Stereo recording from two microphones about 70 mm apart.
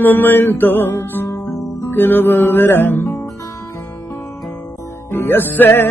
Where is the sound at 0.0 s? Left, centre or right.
Left.